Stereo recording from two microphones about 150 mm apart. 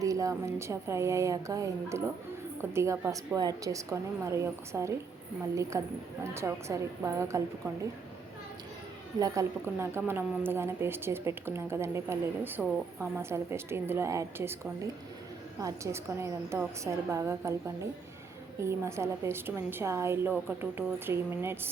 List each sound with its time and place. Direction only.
0.0 s a woman's voice: 20° right (ahead or behind)
9.1 s a woman's voice: 20° right (ahead or behind)